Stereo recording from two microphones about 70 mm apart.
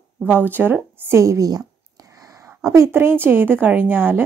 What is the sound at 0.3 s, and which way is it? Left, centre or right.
Speech, right.